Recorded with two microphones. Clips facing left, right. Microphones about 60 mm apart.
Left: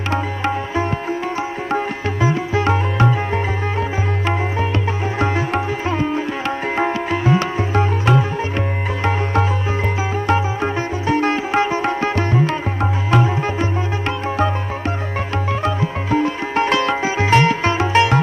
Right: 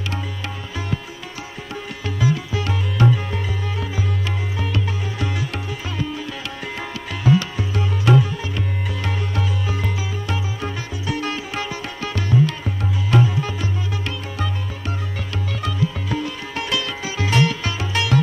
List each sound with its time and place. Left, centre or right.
0.1 s music: left
2.2 s music: left
5.2 s music: left
6.8 s sitar: left
9.0 s music: left
15.6 s music: left